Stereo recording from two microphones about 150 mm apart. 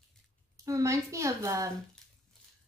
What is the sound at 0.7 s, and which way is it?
A woman's voice, 20° right (ahead or behind).